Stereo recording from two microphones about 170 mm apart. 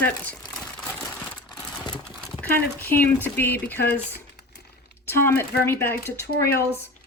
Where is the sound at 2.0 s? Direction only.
5° left (ahead or behind).